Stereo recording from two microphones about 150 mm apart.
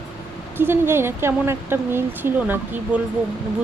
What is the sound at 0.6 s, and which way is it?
Speech, 15° right (ahead or behind).